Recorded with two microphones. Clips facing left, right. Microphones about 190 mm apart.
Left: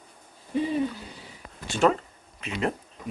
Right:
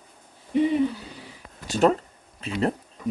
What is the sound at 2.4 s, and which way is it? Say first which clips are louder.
Speech: right 3 dB; 35° right (ahead or behind).